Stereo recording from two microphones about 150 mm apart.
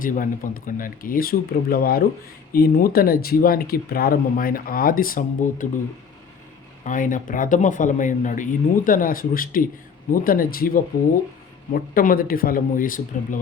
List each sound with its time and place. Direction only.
0.0 s speech: 65° left (ahead or behind)
6.8 s speech: 60° left (ahead or behind)